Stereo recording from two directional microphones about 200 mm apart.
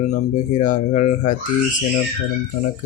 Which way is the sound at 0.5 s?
40° left (ahead or behind).